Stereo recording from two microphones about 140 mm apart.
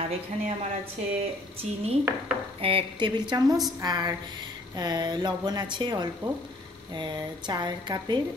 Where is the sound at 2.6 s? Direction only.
35° right (ahead or behind).